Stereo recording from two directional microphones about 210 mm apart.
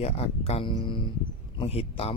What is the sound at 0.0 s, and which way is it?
Speech, 30° left (ahead or behind).